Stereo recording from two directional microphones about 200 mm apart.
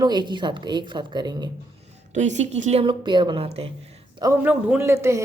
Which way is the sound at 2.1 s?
35° right (ahead or behind).